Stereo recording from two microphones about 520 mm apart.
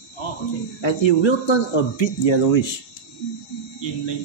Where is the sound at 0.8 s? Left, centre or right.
Left.